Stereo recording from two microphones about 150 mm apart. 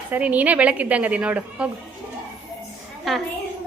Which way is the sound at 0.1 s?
10° right (ahead or behind).